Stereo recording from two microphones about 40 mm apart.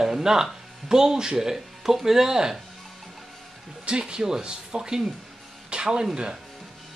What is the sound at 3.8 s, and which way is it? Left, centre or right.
Speech, centre.